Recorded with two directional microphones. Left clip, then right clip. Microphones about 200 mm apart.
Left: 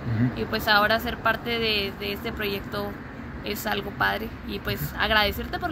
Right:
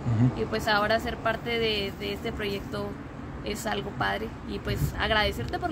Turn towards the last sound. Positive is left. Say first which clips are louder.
# left 2 dB
turn(degrees=-15)  # may be behind; listen again after turning